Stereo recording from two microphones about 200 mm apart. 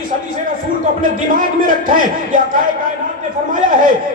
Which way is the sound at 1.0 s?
45° right (ahead or behind).